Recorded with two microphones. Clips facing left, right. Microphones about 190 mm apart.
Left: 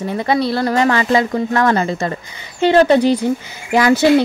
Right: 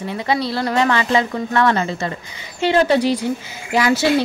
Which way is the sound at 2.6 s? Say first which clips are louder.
Left 4 dB; 50° left (ahead or behind).